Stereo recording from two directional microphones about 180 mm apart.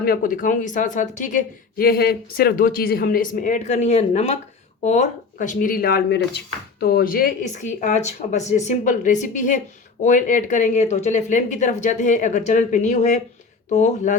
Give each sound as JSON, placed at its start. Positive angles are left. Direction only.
{"t": 0.0, "sound": "speech", "side_deg": 50}